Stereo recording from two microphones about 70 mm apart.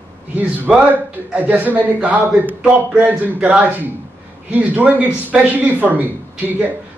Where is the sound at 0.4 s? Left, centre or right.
Right.